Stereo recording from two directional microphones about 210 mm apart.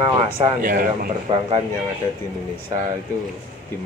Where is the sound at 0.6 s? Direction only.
40° right (ahead or behind).